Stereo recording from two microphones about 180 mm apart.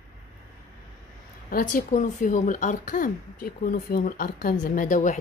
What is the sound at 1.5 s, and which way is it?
Speech, 45° left (ahead or behind).